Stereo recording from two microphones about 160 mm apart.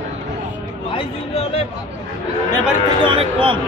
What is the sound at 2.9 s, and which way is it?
Speech, 30° right (ahead or behind).